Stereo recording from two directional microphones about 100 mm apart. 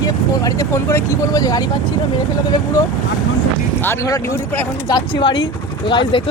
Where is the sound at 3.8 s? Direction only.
25° left (ahead or behind).